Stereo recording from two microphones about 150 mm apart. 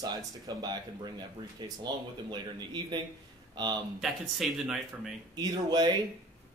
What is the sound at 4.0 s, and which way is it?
Speech, centre (ahead or behind).